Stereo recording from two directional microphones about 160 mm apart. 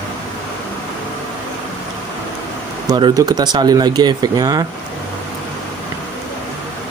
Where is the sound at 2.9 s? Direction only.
25° right (ahead or behind).